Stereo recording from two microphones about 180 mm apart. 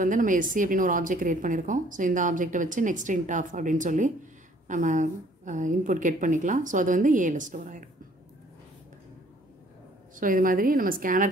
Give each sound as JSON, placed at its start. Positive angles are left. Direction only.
{"t": 0.0, "sound": "a woman's voice", "side_deg": -45}
{"t": 10.1, "sound": "a woman's voice", "side_deg": -50}